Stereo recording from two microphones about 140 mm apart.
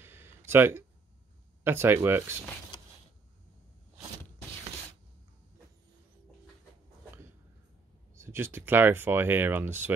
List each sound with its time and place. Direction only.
0.0 s a sound: 15° right (ahead or behind)
1.6 s speech: 15° right (ahead or behind)
8.2 s speech: 15° right (ahead or behind)